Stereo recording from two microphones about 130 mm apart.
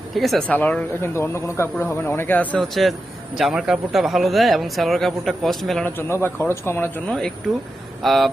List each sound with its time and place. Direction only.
0.2 s speech: centre (ahead or behind)
3.3 s speech: 5° right (ahead or behind)
5.8 s speech: 20° left (ahead or behind)
7.1 s speech: 5° left (ahead or behind)